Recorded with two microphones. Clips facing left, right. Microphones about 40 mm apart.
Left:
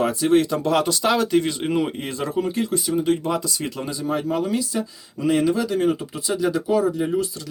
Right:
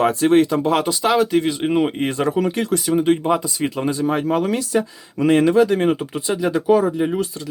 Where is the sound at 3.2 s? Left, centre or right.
Right.